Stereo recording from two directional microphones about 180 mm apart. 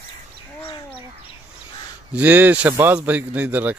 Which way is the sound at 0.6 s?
30° left (ahead or behind).